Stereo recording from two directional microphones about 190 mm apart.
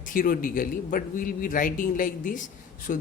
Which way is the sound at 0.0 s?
45° left (ahead or behind).